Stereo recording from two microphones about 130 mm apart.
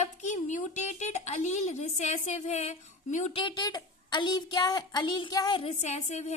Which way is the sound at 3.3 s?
40° left (ahead or behind).